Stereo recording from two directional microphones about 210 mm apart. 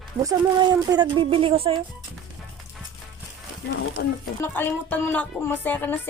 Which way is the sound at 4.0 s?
50° left (ahead or behind).